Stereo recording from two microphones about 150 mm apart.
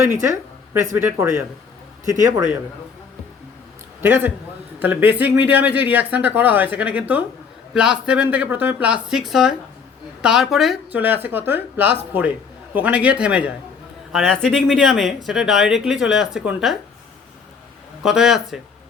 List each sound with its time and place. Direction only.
0.0 s speech: 20° right (ahead or behind)
4.0 s speech: 15° right (ahead or behind)
14.1 s speech: 5° left (ahead or behind)
18.0 s speech: 5° right (ahead or behind)